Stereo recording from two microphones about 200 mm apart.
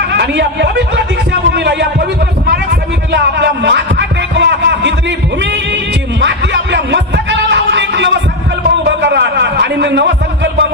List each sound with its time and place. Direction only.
0.1 s speech: 55° right (ahead or behind)
3.1 s music: 60° right (ahead or behind)
6.1 s music: 60° right (ahead or behind)